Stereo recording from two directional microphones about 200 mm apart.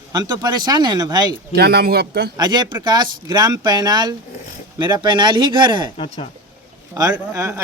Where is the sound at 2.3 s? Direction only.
20° right (ahead or behind).